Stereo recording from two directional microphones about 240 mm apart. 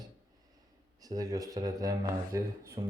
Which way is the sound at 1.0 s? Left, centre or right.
Centre.